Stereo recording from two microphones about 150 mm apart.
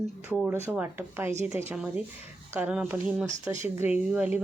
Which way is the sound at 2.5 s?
10° right (ahead or behind).